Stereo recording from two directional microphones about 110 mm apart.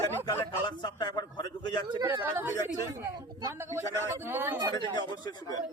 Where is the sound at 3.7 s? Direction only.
20° right (ahead or behind).